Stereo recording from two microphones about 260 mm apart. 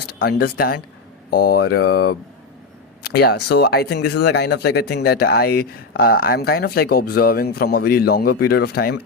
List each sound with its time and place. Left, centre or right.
0.1 s speech: left
3.0 s a sound: left
3.5 s speech: left